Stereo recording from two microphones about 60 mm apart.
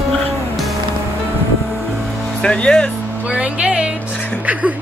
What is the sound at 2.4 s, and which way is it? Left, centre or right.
Speech, centre.